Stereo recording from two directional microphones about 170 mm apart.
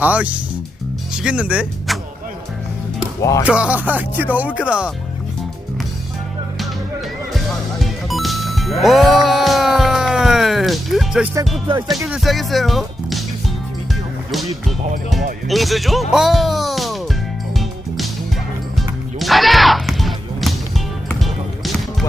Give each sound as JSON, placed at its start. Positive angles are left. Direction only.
{"t": 0.0, "sound": "speech", "side_deg": -10}
{"t": 3.2, "sound": "speech", "side_deg": 20}
{"t": 3.4, "sound": "speech", "side_deg": -5}
{"t": 7.8, "sound": "music", "side_deg": 0}
{"t": 11.9, "sound": "speech", "side_deg": -5}
{"t": 15.4, "sound": "speech", "side_deg": 0}
{"t": 17.6, "sound": "music", "side_deg": 0}